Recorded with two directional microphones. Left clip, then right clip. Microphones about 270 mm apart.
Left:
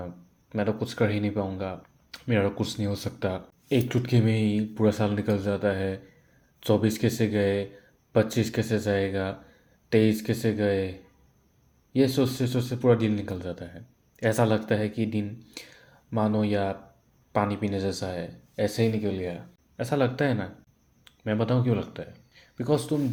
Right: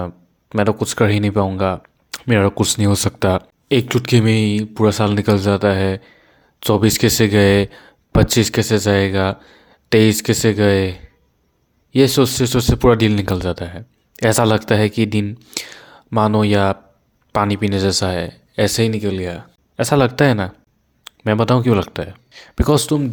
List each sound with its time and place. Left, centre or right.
0.0 s speech: right